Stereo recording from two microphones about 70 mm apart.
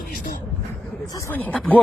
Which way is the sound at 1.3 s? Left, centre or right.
Left.